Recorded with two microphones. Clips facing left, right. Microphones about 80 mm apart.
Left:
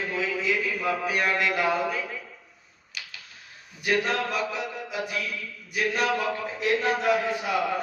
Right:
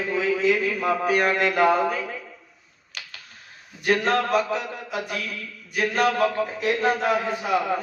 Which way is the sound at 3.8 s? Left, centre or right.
Right.